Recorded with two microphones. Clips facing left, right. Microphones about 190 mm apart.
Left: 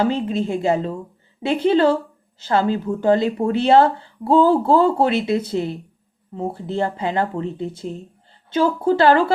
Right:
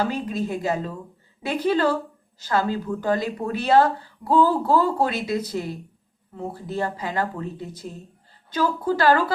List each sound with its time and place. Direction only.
0.0 s speech: 25° left (ahead or behind)